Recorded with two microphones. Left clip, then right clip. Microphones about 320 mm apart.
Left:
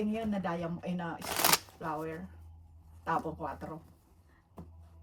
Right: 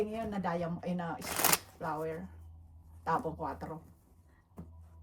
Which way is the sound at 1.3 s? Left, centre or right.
Centre.